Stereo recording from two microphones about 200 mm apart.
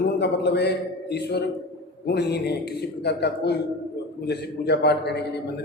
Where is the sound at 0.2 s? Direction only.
55° left (ahead or behind).